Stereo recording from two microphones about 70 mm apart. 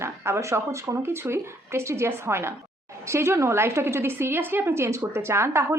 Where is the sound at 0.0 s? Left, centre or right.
Right.